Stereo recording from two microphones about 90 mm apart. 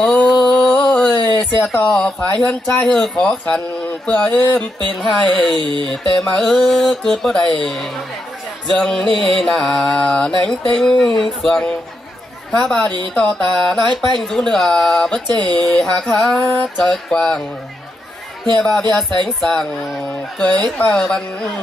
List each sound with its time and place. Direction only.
0.0 s a sound: 5° left (ahead or behind)
1.8 s speech: 10° left (ahead or behind)
5.6 s a sound: 65° right (ahead or behind)
5.9 s music: 5° left (ahead or behind)
8.7 s speech: 5° left (ahead or behind)
18.6 s speech: 10° left (ahead or behind)